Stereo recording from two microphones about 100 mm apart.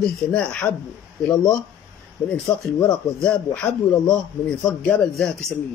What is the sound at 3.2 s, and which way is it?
Speech, 10° left (ahead or behind).